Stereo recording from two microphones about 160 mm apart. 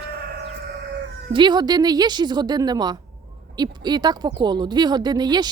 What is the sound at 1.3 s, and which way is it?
A woman's voice, 30° right (ahead or behind).